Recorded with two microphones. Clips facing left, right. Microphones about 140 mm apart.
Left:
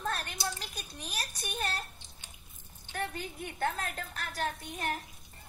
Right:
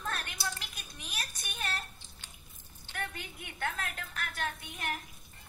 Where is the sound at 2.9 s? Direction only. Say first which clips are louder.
Left 4 dB; 35° left (ahead or behind).